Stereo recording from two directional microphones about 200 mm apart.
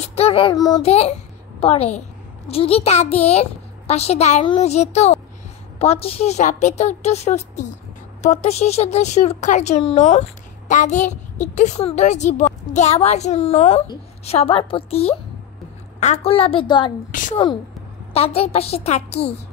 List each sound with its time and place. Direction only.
0.0 s child singing: 30° left (ahead or behind)
0.8 s a child's voice: 30° left (ahead or behind)
17.1 s a child's voice: 40° left (ahead or behind)
18.1 s a child's voice: 30° left (ahead or behind)